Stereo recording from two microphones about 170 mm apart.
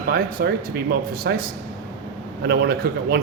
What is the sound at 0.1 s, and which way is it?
Speech, 65° right (ahead or behind).